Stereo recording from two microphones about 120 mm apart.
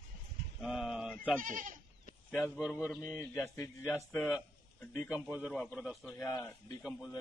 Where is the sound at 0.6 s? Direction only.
5° right (ahead or behind).